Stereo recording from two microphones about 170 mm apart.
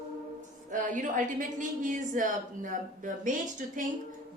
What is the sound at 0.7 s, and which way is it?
A woman's voice, 50° right (ahead or behind).